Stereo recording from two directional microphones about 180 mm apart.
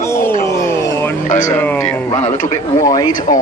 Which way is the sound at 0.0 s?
15° left (ahead or behind).